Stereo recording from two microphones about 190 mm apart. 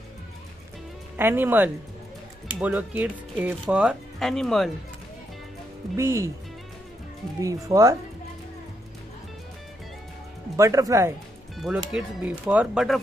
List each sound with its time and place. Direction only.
1.1 s speech: 10° right (ahead or behind)
5.9 s speech: 15° right (ahead or behind)
7.4 s speech: 15° right (ahead or behind)
10.5 s speech: 15° right (ahead or behind)
11.5 s speech: centre (ahead or behind)